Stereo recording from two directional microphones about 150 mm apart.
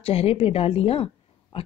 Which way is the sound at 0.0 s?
40° left (ahead or behind).